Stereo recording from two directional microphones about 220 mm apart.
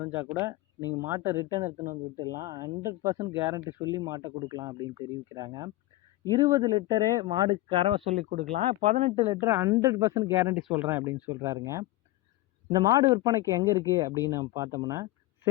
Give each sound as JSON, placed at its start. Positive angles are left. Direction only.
{"t": 0.0, "sound": "speech", "side_deg": -10}
{"t": 9.4, "sound": "speech", "side_deg": -10}